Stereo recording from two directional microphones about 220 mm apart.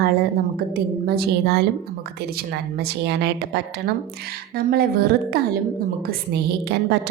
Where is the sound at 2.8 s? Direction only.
50° right (ahead or behind).